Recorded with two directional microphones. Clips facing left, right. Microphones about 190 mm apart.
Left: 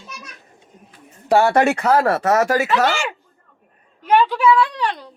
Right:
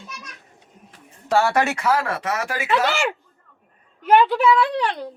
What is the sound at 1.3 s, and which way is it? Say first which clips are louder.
A man's voice: left 4 dB; 35° left (ahead or behind).